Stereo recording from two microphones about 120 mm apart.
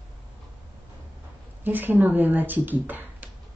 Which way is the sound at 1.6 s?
15° right (ahead or behind).